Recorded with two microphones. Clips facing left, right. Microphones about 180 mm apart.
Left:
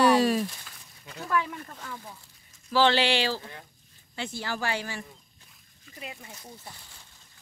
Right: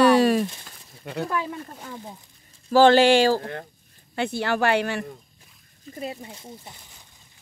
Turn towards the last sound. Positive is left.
turn(degrees=-25)  # may be behind; listen again after turning